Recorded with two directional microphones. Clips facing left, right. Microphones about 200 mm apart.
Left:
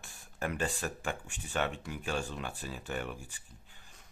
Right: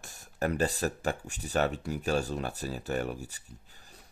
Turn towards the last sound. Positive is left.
turn(degrees=-40)  # may be behind; listen again after turning